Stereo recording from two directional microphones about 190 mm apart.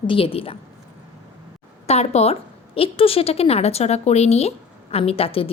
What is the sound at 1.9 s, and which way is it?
A woman's voice, 35° left (ahead or behind).